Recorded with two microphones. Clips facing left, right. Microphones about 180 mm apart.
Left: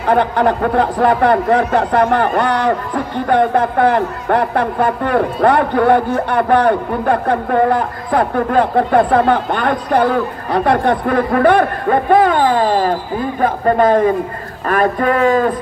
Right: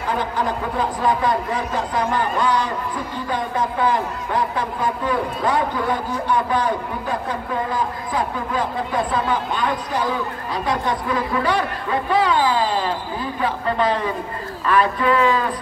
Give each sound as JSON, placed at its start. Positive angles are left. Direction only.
{"t": 0.0, "sound": "a man's voice", "side_deg": 65}